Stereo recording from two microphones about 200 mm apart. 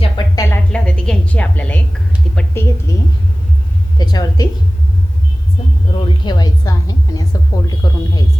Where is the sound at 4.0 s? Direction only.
20° left (ahead or behind).